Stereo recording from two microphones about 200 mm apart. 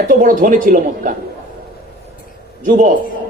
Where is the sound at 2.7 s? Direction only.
40° right (ahead or behind).